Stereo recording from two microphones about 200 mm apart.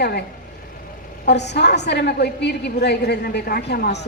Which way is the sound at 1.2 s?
60° left (ahead or behind).